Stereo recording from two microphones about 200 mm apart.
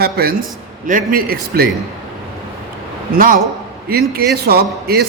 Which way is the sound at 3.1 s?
45° right (ahead or behind).